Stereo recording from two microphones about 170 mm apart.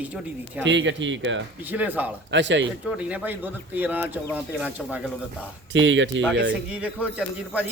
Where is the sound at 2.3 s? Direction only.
90° right.